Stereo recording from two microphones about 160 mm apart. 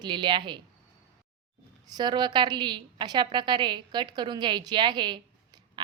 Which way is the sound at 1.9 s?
25° right (ahead or behind).